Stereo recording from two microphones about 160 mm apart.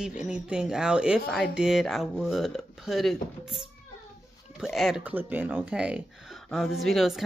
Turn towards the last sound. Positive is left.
turn(degrees=0)  # may be behind; listen again after turning